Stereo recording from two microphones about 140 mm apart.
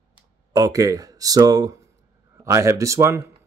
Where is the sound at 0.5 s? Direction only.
25° right (ahead or behind).